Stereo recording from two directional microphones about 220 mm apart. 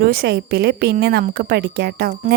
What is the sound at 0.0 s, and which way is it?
A woman's voice, 45° right (ahead or behind).